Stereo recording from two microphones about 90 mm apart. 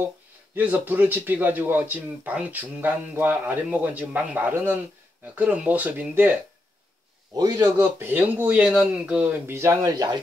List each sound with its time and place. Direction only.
0.6 s speech: 20° right (ahead or behind)
7.3 s a man's voice: 40° right (ahead or behind)
8.0 s speech: 25° right (ahead or behind)
9.6 s a man's voice: 30° right (ahead or behind)